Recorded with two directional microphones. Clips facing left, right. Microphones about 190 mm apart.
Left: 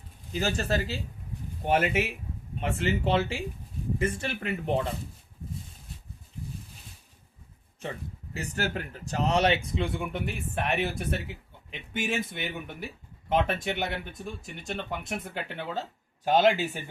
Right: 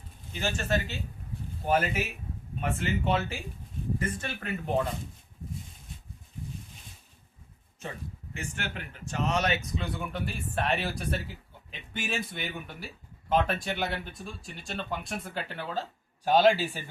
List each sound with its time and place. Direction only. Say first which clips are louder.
0.3 s speech: left 2 dB; 35° left (ahead or behind)
8.3 s speech: left 6 dB; 40° left (ahead or behind); by 16.8 s 20° left (ahead or behind)